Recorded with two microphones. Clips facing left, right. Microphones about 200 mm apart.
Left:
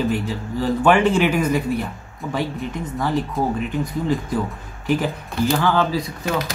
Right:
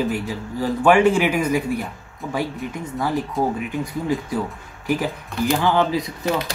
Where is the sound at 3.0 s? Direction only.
10° right (ahead or behind).